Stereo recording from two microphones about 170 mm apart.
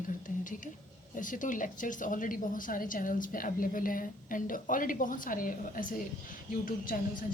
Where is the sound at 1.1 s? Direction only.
50° left (ahead or behind).